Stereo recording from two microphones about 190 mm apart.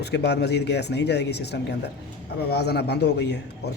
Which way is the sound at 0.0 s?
60° left (ahead or behind).